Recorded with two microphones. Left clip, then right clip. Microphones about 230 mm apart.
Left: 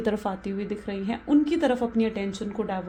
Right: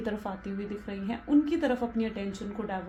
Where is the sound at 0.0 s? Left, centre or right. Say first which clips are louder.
Left 7 dB; left.